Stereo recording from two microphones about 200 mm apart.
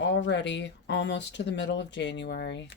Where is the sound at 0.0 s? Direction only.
60° left (ahead or behind).